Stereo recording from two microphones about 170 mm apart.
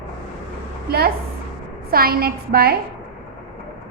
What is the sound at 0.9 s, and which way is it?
A woman's voice, 65° right (ahead or behind).